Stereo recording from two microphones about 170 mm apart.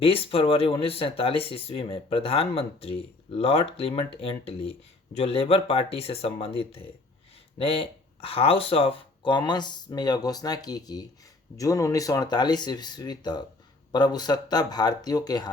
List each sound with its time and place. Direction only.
0.0 s speech: 35° left (ahead or behind)